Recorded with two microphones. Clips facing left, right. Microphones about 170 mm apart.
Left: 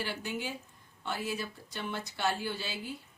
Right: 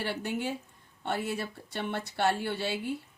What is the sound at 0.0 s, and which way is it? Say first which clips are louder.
Speech: right 4 dB; 65° right (ahead or behind).